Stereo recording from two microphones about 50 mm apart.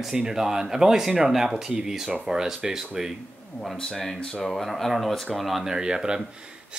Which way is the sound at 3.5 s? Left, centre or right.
Centre.